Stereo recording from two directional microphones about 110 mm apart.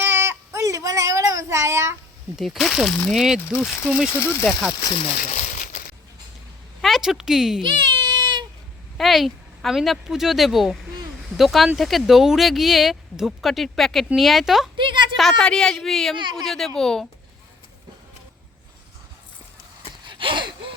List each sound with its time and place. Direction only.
0.0 s a sound: 20° right (ahead or behind)
2.3 s speech: centre (ahead or behind)
4.8 s speech: 75° left (ahead or behind)
6.8 s speech: centre (ahead or behind)
7.6 s baby cry: 45° right (ahead or behind)
9.0 s speech: centre (ahead or behind)
14.8 s a sound: 45° right (ahead or behind)
15.1 s speech: centre (ahead or behind)
16.1 s speech: 45° right (ahead or behind)
16.4 s speech: 5° left (ahead or behind)
20.1 s a sound: 50° right (ahead or behind)